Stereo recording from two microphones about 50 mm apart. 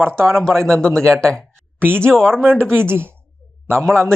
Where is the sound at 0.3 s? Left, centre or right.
Centre.